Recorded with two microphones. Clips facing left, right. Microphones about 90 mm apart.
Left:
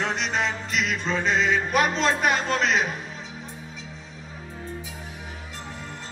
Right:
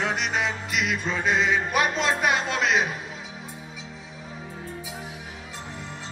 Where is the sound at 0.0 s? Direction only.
5° right (ahead or behind).